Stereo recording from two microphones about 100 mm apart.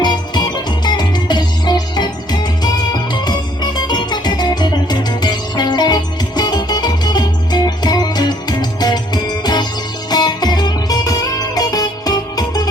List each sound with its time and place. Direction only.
0.0 s music: 45° left (ahead or behind)